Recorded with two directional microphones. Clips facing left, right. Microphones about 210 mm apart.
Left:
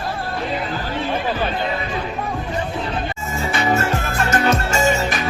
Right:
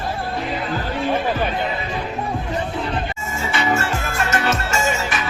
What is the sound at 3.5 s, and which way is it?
Music, 35° left (ahead or behind).